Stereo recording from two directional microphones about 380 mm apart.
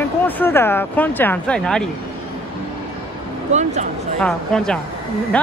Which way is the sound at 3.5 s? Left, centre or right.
Centre.